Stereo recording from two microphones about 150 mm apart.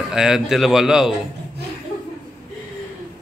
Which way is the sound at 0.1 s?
5° right (ahead or behind).